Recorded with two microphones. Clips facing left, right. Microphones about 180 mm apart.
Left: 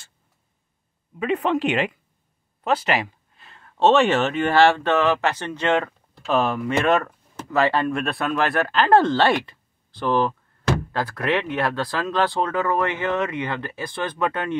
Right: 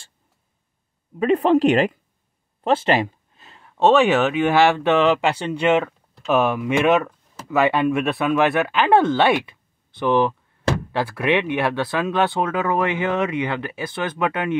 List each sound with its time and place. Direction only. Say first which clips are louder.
1.2 s speech: right 6 dB; 35° right (ahead or behind)
2.6 s a sound: right 4 dB; 30° right (ahead or behind)
3.8 s speech: right 2 dB; 5° right (ahead or behind)
11.0 s speech: right 3 dB; 10° right (ahead or behind)